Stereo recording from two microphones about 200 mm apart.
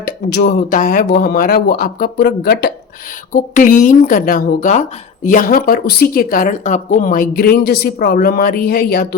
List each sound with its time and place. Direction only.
0.0 s speech: 50° left (ahead or behind)
3.3 s speech: 40° left (ahead or behind)